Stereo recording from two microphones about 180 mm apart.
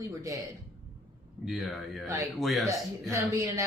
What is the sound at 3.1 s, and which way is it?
Speech, 15° right (ahead or behind).